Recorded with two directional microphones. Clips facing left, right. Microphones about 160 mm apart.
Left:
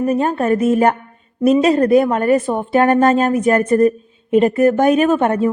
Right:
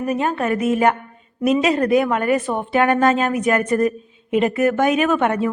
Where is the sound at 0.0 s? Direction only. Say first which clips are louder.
Left 4 dB; 35° left (ahead or behind).